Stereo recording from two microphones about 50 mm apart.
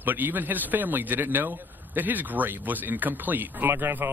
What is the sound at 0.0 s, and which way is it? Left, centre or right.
Speech, right.